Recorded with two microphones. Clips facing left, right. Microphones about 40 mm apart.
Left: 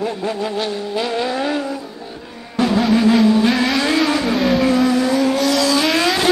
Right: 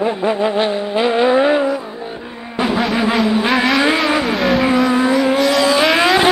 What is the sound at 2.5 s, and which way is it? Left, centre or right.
Music, right.